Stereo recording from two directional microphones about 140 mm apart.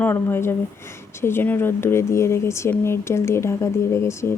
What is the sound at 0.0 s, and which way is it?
Speech, 15° left (ahead or behind).